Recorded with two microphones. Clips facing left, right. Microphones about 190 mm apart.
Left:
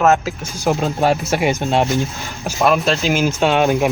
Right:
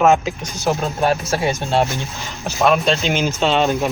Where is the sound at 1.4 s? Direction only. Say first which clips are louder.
Left 2 dB; 15° left (ahead or behind).